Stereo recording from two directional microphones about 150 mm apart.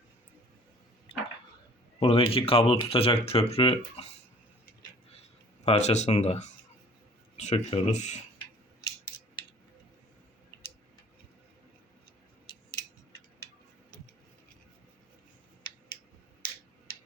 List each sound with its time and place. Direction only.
1.1 s a sound: 35° left (ahead or behind)
2.0 s speech: 35° left (ahead or behind)
5.6 s speech: 45° left (ahead or behind)